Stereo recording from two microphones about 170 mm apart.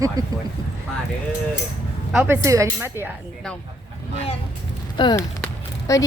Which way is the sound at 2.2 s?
15° right (ahead or behind).